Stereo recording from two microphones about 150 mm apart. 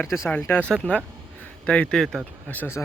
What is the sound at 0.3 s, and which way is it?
Speech, 15° left (ahead or behind).